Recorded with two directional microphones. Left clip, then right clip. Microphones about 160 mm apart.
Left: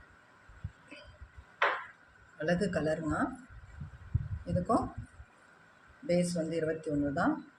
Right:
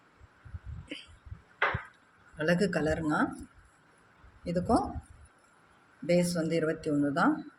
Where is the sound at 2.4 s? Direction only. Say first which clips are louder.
Right 3 dB; 50° right (ahead or behind).